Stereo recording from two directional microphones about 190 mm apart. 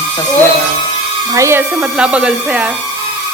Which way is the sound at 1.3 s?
15° right (ahead or behind).